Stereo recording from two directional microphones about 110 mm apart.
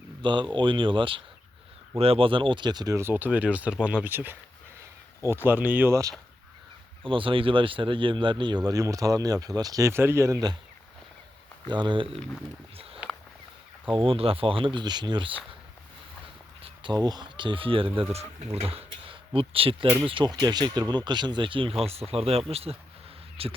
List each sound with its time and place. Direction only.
0.2 s speech: 45° right (ahead or behind); by 6.1 s 30° right (ahead or behind)
7.0 s speech: 50° right (ahead or behind); by 10.5 s 30° right (ahead or behind)
11.7 s speech: 45° right (ahead or behind)
12.1 s speech: 5° left (ahead or behind)
12.7 s speech: 60° right (ahead or behind)
16.8 s speech: 40° right (ahead or behind); by 18.0 s 55° right (ahead or behind)
18.1 s speech: 70° right (ahead or behind); by 20.3 s 50° right (ahead or behind)
20.3 s speech: 40° right (ahead or behind); by 23.5 s 60° right (ahead or behind)